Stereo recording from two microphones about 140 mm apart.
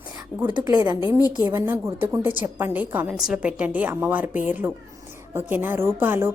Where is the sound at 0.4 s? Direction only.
30° right (ahead or behind).